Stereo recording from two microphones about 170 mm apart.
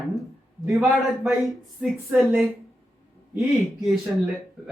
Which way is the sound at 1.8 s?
Centre (ahead or behind).